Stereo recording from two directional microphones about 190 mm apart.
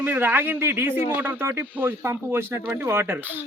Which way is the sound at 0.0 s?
10° right (ahead or behind).